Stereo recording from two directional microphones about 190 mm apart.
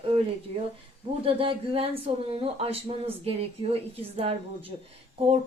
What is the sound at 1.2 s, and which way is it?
A woman's voice, 30° right (ahead or behind).